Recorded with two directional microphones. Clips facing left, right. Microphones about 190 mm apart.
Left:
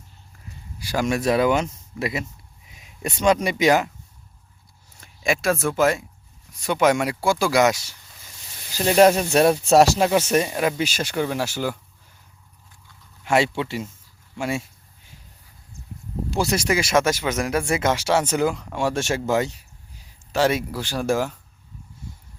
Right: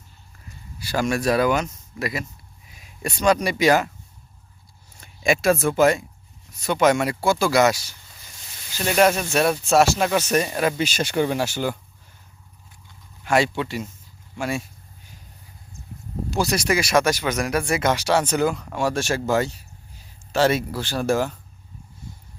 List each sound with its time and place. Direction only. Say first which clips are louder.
0.8 s speech: even; 15° left (ahead or behind)
2.6 s a sound: even; 20° left (ahead or behind)
3.4 s speech: even; 20° left (ahead or behind)
4.9 s speech: right 3 dB; centre (ahead or behind)
6.5 s speech: right 1 dB; 15° left (ahead or behind); by 10.1 s 35° left (ahead or behind)
10.1 s speech: left 2 dB; 20° left (ahead or behind)
10.4 s speech: even; 10° left (ahead or behind)
13.2 s speech: even; 25° left (ahead or behind)
16.3 s speech: even; 25° left (ahead or behind); by 21.3 s 10° left (ahead or behind)